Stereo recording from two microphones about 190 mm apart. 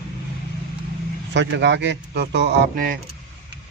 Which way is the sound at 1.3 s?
65° right (ahead or behind).